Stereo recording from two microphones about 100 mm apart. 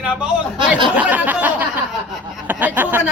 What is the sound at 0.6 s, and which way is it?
Speech, 55° right (ahead or behind).